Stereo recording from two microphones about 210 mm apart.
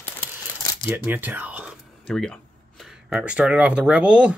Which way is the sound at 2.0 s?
5° left (ahead or behind).